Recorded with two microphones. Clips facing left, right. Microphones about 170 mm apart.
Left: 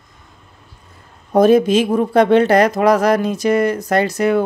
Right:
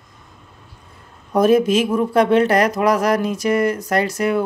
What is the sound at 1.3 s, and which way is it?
Speech, 30° left (ahead or behind).